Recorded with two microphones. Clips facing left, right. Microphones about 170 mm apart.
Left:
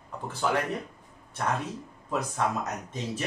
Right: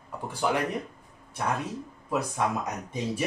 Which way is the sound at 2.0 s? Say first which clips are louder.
Right 1 dB; 10° right (ahead or behind).